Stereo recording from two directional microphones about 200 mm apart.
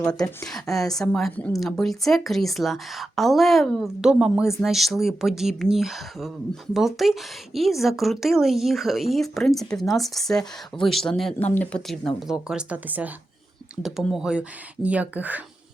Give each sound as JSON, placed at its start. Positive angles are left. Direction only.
{"t": 0.1, "sound": "speech", "side_deg": 20}
{"t": 0.4, "sound": "a woman's voice", "side_deg": 0}